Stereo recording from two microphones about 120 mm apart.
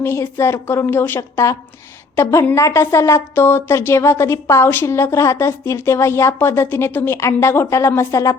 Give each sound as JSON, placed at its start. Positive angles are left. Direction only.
{"t": 0.0, "sound": "a woman's voice", "side_deg": 20}